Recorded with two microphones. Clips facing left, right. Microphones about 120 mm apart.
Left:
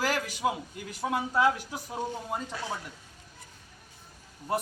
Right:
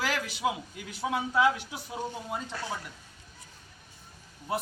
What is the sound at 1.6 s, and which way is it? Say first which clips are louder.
Speech: left 2 dB; 40° left (ahead or behind).